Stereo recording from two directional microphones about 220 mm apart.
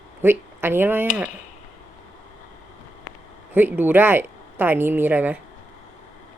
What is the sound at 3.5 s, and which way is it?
Speech, 10° right (ahead or behind).